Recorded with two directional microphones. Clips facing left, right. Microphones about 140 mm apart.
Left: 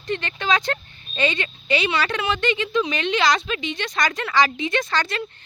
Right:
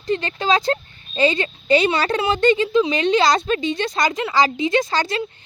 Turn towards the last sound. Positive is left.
turn(degrees=-30)  # may be behind; listen again after turning